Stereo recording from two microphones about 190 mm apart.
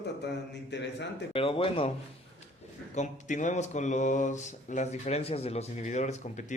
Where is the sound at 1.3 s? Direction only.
30° left (ahead or behind).